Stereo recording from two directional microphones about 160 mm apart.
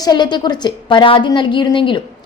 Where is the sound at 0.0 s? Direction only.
25° left (ahead or behind).